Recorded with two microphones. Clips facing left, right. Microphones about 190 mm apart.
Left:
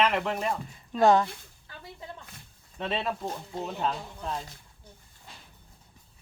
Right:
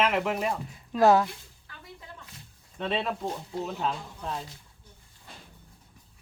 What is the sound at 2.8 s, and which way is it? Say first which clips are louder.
Speech: right 1 dB; centre (ahead or behind).